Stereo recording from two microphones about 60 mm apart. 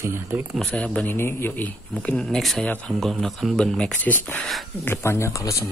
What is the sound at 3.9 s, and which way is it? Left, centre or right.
Speech, left.